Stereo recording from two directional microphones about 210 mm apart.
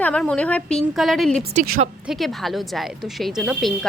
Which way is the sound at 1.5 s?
45° right (ahead or behind).